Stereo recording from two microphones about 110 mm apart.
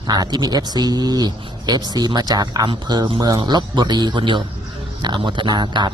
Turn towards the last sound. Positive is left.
turn(degrees=-45)  # may be behind; listen again after turning